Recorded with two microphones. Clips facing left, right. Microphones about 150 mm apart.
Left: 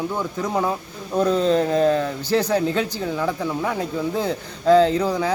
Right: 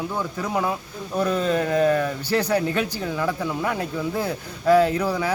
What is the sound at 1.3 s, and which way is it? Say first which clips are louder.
Speech: left 3 dB; 25° left (ahead or behind).